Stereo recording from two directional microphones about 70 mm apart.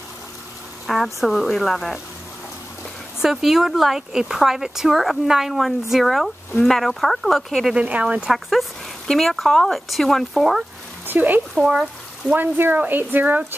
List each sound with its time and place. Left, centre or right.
0.8 s a woman's voice: centre
3.2 s a woman's voice: centre
7.7 s speech: centre
8.3 s a woman's voice: centre
11.1 s speech: right
11.5 s speech: centre
12.4 s speech: right